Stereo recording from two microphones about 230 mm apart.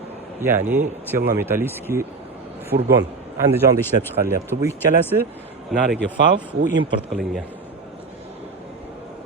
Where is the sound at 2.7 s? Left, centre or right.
Right.